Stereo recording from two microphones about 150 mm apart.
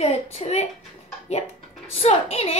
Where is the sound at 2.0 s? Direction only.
40° left (ahead or behind).